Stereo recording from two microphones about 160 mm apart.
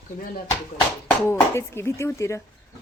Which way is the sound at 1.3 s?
15° left (ahead or behind).